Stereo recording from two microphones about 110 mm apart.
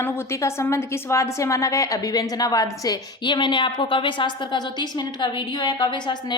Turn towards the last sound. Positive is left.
turn(degrees=40)  # may be behind; listen again after turning